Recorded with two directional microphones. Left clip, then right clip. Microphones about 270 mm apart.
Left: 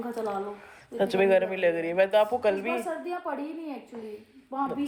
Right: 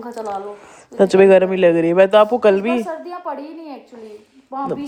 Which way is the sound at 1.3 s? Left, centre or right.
Right.